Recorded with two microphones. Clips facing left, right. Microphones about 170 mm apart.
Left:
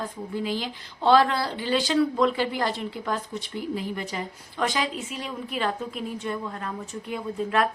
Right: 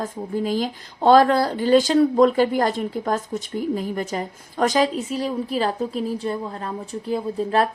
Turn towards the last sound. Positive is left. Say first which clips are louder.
# right 5 dB
turn(degrees=-35)  # may be behind; listen again after turning